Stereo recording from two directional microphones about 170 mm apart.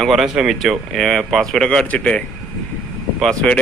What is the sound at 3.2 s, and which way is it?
Speech, 5° left (ahead or behind).